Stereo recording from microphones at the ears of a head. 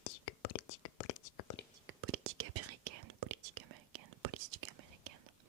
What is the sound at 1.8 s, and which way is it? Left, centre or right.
Whispering, right.